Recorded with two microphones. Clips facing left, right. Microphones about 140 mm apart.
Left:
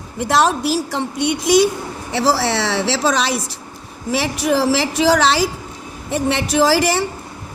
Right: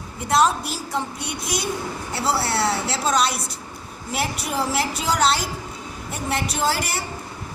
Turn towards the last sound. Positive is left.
turn(degrees=90)